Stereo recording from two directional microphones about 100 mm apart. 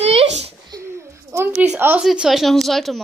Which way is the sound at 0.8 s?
25° right (ahead or behind).